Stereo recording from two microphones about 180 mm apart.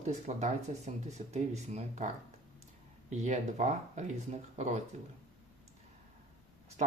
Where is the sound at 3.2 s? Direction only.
40° right (ahead or behind).